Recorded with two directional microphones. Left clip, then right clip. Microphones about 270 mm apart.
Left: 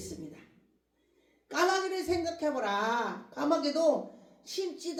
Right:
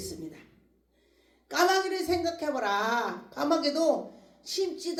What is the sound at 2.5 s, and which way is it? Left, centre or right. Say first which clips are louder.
Speech: right 4 dB; right.